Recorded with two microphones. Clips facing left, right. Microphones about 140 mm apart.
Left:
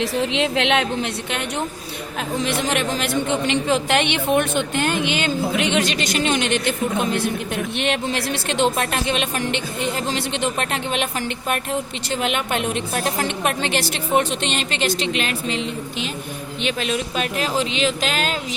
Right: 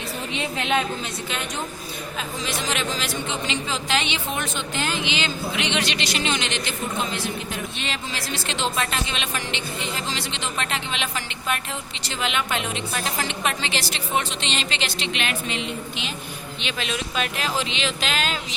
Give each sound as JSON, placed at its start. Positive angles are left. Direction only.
{"t": 0.0, "sound": "a woman's voice", "side_deg": 90}
{"t": 2.4, "sound": "speech", "side_deg": 55}